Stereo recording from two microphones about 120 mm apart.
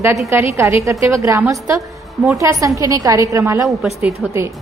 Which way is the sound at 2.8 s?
30° right (ahead or behind).